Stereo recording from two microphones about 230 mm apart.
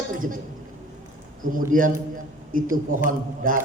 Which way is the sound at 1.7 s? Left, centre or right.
Right.